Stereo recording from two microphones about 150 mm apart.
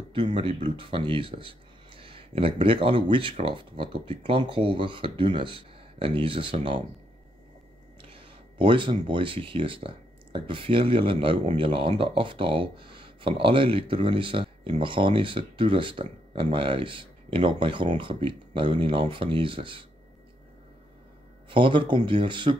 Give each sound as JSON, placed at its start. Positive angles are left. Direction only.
{"t": 0.1, "sound": "speech", "side_deg": -35}
{"t": 8.0, "sound": "a sound", "side_deg": -35}
{"t": 9.0, "sound": "speech", "side_deg": -35}
{"t": 21.5, "sound": "speech", "side_deg": -35}